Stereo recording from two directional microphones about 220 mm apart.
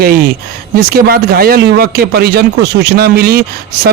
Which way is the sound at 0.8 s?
45° right (ahead or behind).